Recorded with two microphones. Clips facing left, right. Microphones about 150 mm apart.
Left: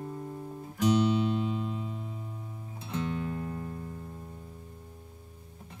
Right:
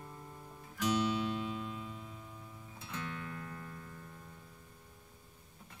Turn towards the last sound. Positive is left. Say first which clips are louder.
# left 10 dB
turn(degrees=30)  # may be behind; listen again after turning